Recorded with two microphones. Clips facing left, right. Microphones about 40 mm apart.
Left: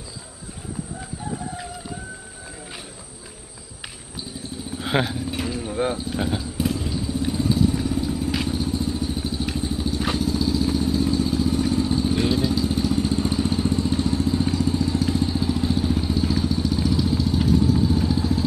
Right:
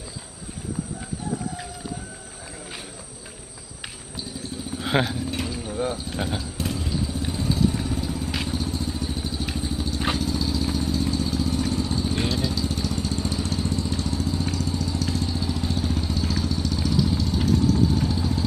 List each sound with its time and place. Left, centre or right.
4.7 s livestock: centre
6.0 s vehicle: centre